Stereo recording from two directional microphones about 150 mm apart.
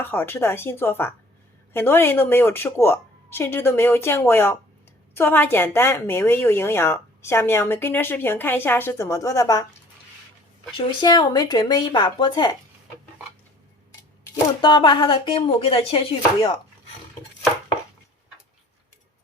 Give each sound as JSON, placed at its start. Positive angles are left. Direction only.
{"t": 0.0, "sound": "a woman's voice", "side_deg": 15}
{"t": 10.7, "sound": "speech", "side_deg": 30}
{"t": 14.6, "sound": "speech", "side_deg": 35}